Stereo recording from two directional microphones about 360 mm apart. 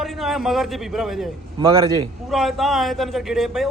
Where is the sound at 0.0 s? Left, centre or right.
Centre.